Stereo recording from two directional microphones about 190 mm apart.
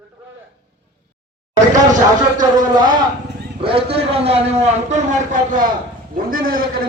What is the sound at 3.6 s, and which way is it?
A man's voice, 30° right (ahead or behind).